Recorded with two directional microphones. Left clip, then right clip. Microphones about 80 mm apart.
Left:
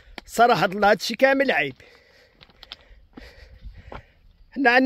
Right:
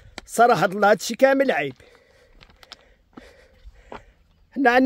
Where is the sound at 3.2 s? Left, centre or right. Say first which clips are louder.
Even; centre.